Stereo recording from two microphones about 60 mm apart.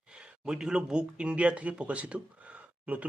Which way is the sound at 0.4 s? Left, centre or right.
Centre.